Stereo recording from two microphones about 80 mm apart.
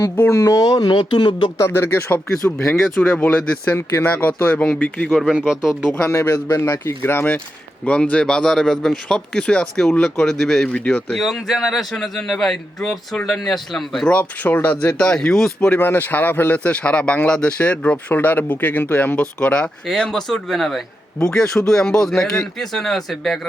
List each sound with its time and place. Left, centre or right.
0.3 s speech: left
0.9 s speech: left
1.6 s speech: left
3.1 s a man's voice: centre
4.0 s a man's voice: left
5.2 s speech: centre
6.1 s a man's voice: left
7.9 s a man's voice: centre
11.2 s a man's voice: centre
14.1 s a man's voice: centre
15.8 s a man's voice: left; by 23.4 s centre